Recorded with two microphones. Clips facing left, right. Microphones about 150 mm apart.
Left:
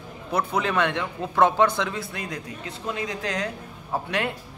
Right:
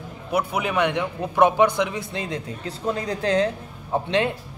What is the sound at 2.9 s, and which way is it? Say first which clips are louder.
Speech: right 6 dB; 35° right (ahead or behind).